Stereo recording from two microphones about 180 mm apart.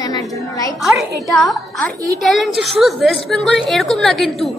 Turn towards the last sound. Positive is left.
turn(degrees=0)  # may be behind; listen again after turning